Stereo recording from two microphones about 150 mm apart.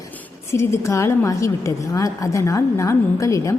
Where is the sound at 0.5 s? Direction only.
20° left (ahead or behind).